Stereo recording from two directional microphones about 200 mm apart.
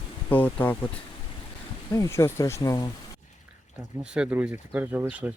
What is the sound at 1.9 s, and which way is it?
Speech, 15° left (ahead or behind).